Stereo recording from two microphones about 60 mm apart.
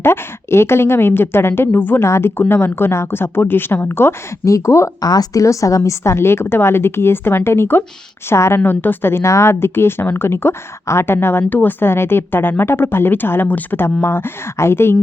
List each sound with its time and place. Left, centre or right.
0.0 s a woman's voice: left
2.0 s a woman's voice: left
4.4 s speech: left
4.9 s a woman's voice: left